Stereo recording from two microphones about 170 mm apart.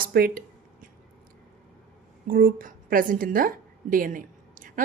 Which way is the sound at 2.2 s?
55° right (ahead or behind).